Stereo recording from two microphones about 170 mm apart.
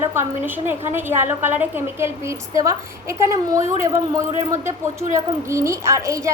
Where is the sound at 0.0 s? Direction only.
15° right (ahead or behind).